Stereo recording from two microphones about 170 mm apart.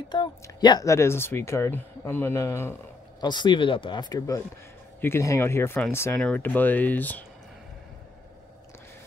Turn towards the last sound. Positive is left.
turn(degrees=10)  # may be behind; listen again after turning